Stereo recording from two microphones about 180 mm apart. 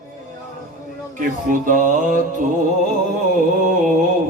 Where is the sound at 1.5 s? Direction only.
45° right (ahead or behind).